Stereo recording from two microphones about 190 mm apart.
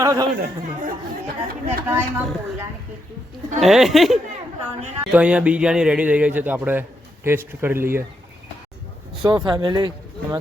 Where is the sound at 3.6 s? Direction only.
Centre (ahead or behind).